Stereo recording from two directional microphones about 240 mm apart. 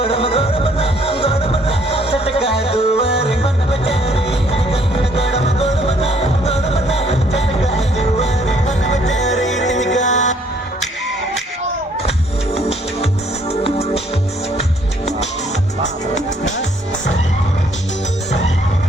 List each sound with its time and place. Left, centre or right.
0.0 s music: left
13.5 s music: left